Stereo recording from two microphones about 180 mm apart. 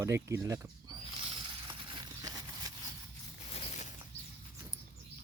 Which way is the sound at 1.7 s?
25° right (ahead or behind).